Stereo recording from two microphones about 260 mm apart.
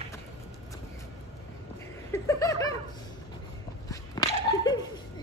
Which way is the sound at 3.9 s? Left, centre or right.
Centre.